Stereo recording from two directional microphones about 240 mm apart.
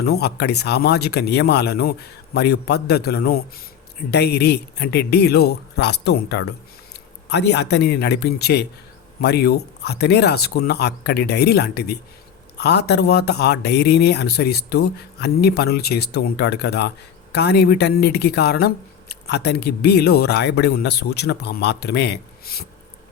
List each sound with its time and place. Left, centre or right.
0.0 s speech: left